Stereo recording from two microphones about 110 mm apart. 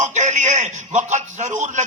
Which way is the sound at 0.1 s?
90° right.